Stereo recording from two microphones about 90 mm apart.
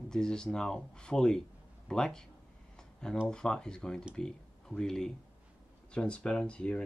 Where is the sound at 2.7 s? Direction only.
5° left (ahead or behind).